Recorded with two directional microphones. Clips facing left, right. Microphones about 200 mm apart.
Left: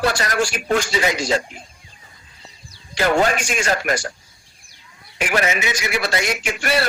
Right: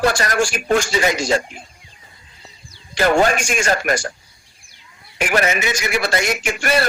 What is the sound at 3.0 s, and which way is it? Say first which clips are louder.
Speech: right 2 dB; 50° right (ahead or behind).